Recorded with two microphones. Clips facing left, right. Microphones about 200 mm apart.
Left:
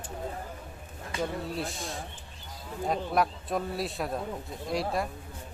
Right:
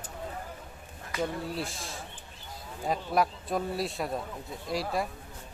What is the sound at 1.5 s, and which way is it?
Speech, centre (ahead or behind).